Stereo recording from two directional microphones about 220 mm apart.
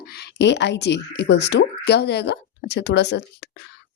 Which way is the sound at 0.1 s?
50° left (ahead or behind).